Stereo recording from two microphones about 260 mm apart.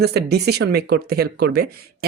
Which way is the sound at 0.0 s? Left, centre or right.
Right.